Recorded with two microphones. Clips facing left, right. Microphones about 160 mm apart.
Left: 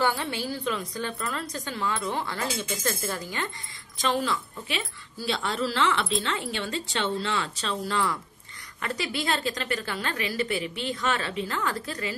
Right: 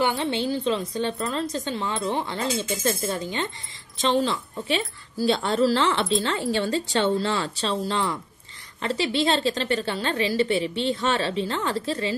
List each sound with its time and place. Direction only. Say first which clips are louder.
0.0 s a woman's voice: right 4 dB; 20° right (ahead or behind)